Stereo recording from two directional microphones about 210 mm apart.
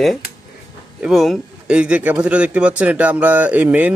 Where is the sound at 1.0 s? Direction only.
Centre (ahead or behind).